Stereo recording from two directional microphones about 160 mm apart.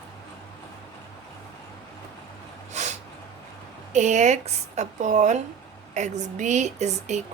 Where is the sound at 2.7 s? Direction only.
45° right (ahead or behind).